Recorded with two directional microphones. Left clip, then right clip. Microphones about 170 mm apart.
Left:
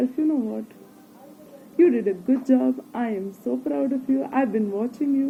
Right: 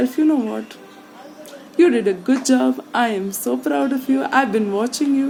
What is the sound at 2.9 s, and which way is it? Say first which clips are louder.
A woman's voice: right 9 dB; 30° right (ahead or behind).